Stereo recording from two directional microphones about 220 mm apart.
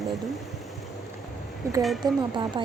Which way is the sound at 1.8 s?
Centre (ahead or behind).